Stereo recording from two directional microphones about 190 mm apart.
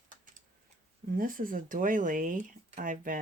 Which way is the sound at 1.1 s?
45° right (ahead or behind).